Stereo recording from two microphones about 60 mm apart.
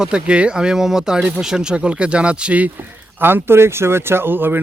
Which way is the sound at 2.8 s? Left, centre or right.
Right.